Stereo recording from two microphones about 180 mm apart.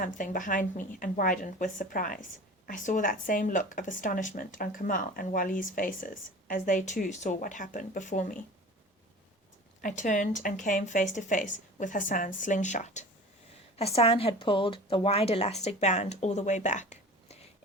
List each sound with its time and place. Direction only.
0.0 s speech: 50° left (ahead or behind)
9.8 s speech: 45° left (ahead or behind)